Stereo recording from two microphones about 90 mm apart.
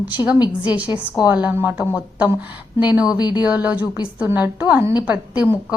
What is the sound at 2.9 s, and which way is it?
Speech, 10° right (ahead or behind).